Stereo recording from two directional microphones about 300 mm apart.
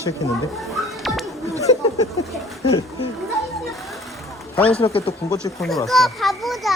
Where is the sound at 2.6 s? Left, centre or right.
Centre.